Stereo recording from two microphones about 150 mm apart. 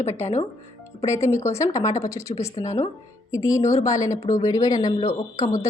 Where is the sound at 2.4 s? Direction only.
45° left (ahead or behind).